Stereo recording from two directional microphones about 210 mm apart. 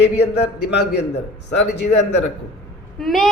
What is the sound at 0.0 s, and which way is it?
A man's voice, 50° left (ahead or behind).